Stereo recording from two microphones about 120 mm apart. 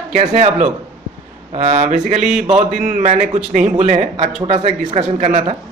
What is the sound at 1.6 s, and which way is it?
A man's voice, 85° right.